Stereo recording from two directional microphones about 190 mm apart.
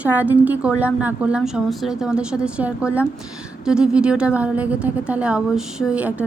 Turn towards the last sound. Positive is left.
turn(degrees=-5)  # may be behind; listen again after turning